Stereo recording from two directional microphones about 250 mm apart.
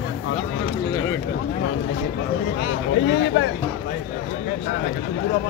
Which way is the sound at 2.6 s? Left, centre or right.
Left.